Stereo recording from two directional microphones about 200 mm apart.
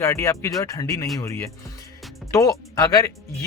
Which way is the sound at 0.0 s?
15° left (ahead or behind).